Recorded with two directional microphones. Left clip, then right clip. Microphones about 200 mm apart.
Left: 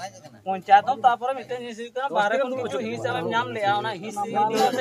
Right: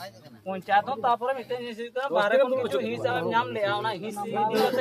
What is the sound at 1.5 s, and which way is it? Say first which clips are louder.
Speech: even; centre (ahead or behind).